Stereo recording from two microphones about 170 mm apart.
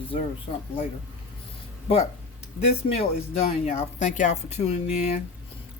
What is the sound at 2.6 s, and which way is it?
Speech, 35° left (ahead or behind).